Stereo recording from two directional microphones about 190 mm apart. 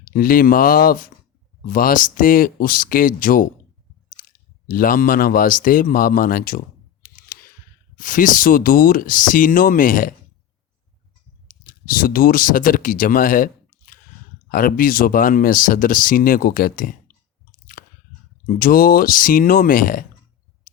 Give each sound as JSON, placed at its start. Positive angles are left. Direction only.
{"t": 0.0, "sound": "speech", "side_deg": 50}
{"t": 4.7, "sound": "speech", "side_deg": 50}
{"t": 7.9, "sound": "speech", "side_deg": 45}
{"t": 11.7, "sound": "speech", "side_deg": 50}
{"t": 17.8, "sound": "squish", "side_deg": 45}
{"t": 18.4, "sound": "speech", "side_deg": 50}